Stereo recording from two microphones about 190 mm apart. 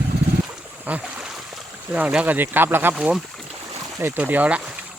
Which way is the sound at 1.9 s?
5° right (ahead or behind).